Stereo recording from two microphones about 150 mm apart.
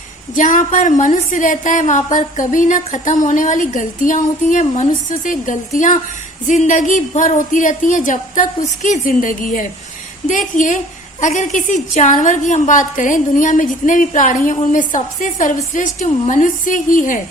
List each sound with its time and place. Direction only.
0.3 s a woman's voice: 60° left (ahead or behind)